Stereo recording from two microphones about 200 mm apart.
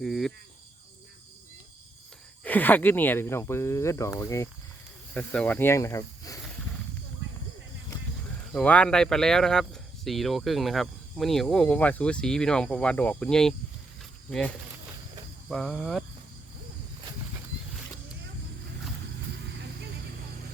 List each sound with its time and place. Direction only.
0.0 s speech: centre (ahead or behind)
2.4 s speech: 10° left (ahead or behind)
8.5 s speech: 5° left (ahead or behind)
19.5 s vehicle: 55° right (ahead or behind)